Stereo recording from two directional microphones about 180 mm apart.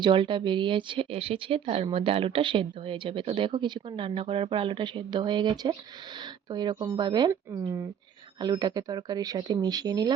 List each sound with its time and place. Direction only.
0.0 s a woman's voice: 30° right (ahead or behind)